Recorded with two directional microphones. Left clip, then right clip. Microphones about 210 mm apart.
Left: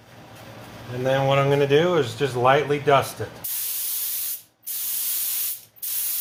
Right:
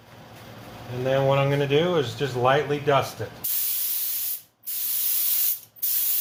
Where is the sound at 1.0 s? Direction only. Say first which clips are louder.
Left 2 dB; 35° left (ahead or behind).